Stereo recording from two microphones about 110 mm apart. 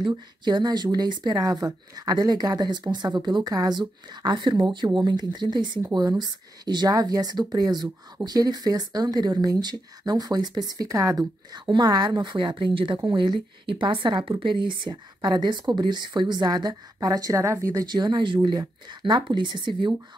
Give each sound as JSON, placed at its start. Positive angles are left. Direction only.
{"t": 0.1, "sound": "speech", "side_deg": -40}
{"t": 17.8, "sound": "speech", "side_deg": -40}